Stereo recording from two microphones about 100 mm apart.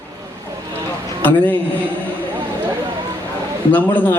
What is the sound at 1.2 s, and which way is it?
Speech, 15° left (ahead or behind).